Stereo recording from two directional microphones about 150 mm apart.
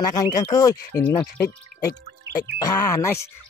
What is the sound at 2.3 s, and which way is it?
Music, 90° right.